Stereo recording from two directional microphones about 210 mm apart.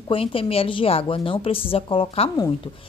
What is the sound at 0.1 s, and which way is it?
A woman's voice, 25° left (ahead or behind).